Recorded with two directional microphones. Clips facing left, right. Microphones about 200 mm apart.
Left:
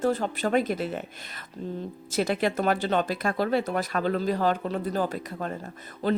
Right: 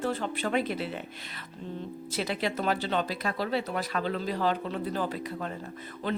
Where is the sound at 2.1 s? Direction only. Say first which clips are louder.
Left 6 dB; 45° left (ahead or behind).